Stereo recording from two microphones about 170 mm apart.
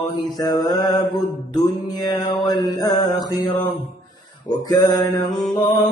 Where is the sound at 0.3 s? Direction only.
20° left (ahead or behind).